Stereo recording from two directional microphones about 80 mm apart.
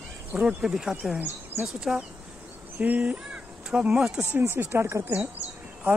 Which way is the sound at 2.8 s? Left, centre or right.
Centre.